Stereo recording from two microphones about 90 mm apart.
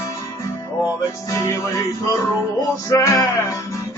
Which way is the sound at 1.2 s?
35° left (ahead or behind).